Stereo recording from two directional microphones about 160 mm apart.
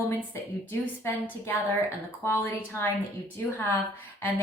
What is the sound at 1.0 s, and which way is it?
A woman's voice, 10° left (ahead or behind).